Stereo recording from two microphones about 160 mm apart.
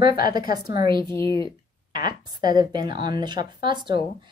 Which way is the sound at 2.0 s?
25° right (ahead or behind).